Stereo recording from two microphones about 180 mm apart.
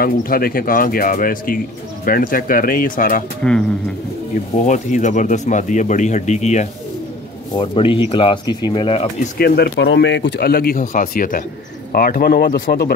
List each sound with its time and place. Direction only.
0.0 s speech: 55° left (ahead or behind)
4.6 s speech: 45° left (ahead or behind)
9.4 s speech: 70° left (ahead or behind)